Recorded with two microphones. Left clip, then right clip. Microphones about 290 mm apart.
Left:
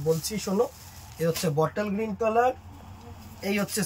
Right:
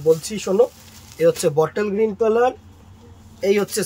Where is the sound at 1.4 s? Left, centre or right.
Right.